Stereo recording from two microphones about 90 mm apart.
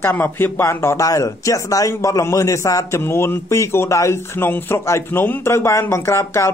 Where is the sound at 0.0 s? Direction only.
25° left (ahead or behind).